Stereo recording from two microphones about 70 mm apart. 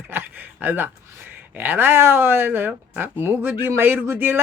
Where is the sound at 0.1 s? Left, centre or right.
Right.